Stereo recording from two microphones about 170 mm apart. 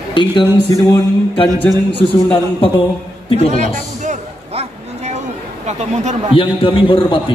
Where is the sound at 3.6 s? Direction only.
45° right (ahead or behind).